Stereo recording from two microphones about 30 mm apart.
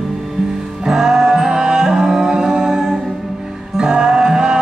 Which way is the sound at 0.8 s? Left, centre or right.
Centre.